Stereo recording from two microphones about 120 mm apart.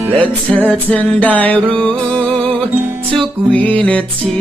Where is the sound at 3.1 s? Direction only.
5° left (ahead or behind).